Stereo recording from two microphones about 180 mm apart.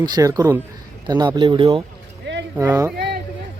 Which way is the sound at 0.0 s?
20° right (ahead or behind).